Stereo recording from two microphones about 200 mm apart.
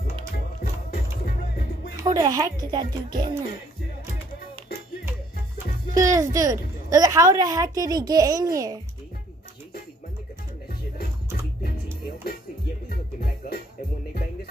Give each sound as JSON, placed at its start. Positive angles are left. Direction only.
{"t": 1.2, "sound": "music", "side_deg": 50}
{"t": 2.0, "sound": "a woman's voice", "side_deg": -20}
{"t": 5.9, "sound": "a woman's voice", "side_deg": -15}
{"t": 12.9, "sound": "music", "side_deg": 50}